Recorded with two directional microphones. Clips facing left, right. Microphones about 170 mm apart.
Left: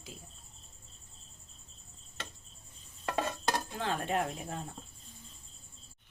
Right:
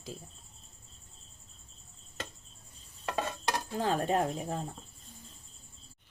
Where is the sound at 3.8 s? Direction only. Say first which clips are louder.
Right 8 dB; 40° right (ahead or behind).